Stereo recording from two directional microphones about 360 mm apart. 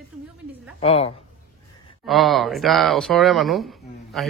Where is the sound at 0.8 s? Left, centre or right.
Centre.